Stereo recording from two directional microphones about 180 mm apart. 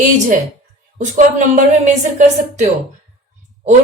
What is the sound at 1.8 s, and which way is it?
Speech, 45° right (ahead or behind).